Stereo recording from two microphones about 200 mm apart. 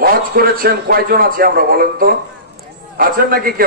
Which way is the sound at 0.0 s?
50° right (ahead or behind).